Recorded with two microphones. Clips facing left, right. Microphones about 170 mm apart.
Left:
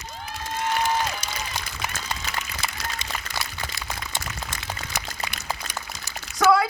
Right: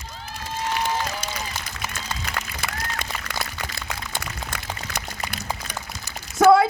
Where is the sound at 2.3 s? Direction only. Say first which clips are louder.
Right 1 dB; 60° right (ahead or behind).